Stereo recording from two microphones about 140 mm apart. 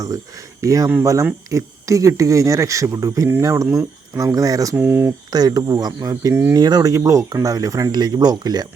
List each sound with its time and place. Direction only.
0.6 s speech: 25° right (ahead or behind)